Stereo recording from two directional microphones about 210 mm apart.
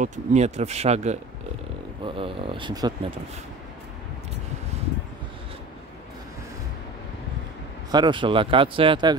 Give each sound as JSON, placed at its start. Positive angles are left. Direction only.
{"t": 0.0, "sound": "speech", "side_deg": -35}
{"t": 7.9, "sound": "speech", "side_deg": -20}